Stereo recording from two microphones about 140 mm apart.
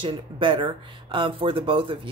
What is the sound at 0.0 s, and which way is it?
A woman's voice, 35° right (ahead or behind).